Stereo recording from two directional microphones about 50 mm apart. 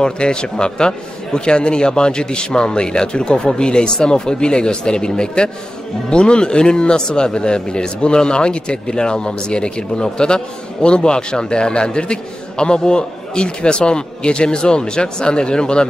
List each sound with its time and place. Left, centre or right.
0.0 s speech: centre